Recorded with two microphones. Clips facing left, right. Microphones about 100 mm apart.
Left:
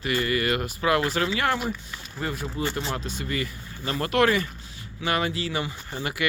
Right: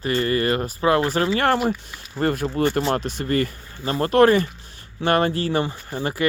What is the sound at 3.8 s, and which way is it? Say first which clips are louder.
Speech: right 6 dB; 35° right (ahead or behind).